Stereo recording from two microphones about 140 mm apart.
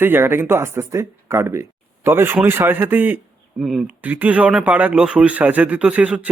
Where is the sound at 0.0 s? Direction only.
15° right (ahead or behind).